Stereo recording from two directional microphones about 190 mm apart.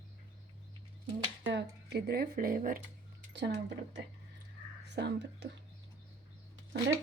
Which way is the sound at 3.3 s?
65° right (ahead or behind).